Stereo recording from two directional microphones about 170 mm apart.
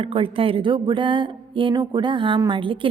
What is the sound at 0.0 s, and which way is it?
A woman's voice, 30° right (ahead or behind).